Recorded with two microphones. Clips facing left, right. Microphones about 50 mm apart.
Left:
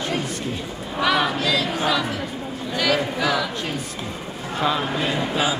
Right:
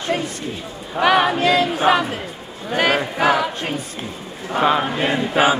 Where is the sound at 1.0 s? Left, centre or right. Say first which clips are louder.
Right 5 dB; right.